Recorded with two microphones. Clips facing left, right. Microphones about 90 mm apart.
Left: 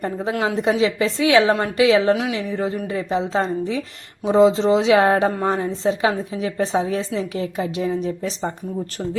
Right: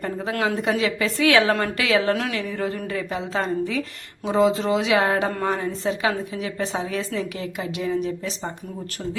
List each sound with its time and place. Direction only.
0.4 s a woman's voice: 25° left (ahead or behind)